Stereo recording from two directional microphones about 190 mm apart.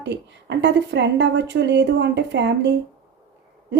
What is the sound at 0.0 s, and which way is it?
A woman's voice, 65° right (ahead or behind).